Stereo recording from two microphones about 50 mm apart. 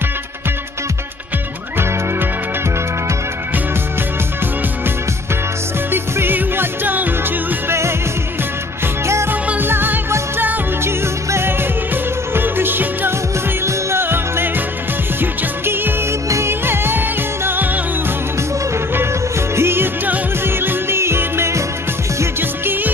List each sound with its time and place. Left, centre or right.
5.9 s music: right
9.0 s music: right
9.6 s music: right
10.8 s music: right
13.7 s music: right
14.0 s music: right
16.3 s music: right
16.6 s music: right
19.5 s music: right